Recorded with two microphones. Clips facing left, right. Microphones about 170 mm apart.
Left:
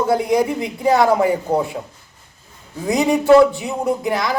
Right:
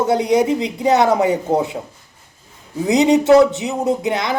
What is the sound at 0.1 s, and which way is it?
Speech, 20° right (ahead or behind).